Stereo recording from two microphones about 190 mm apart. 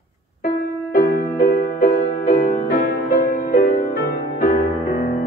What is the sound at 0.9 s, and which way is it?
Music, 50° left (ahead or behind).